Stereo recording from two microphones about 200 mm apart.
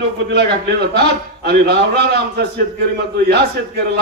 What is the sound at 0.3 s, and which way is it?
A man's voice, 55° right (ahead or behind).